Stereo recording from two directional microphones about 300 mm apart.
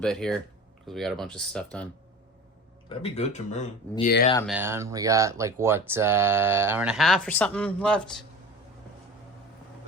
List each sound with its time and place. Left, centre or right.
0.0 s speech: centre
3.0 s speech: left
4.4 s speech: centre